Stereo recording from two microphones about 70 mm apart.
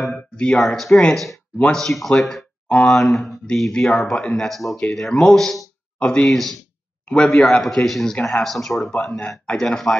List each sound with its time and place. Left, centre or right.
0.1 s a sound: centre
0.6 s speech: centre
2.7 s a man's voice: centre
3.0 s a man's voice: centre